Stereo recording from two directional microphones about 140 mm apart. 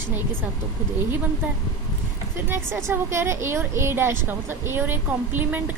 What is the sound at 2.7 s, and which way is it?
A woman's voice, 20° right (ahead or behind).